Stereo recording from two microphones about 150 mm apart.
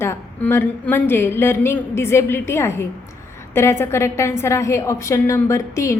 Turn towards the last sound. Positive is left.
turn(degrees=20)  # may be behind; listen again after turning